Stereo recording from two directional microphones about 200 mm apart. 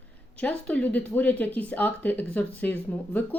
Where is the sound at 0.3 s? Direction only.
5° left (ahead or behind).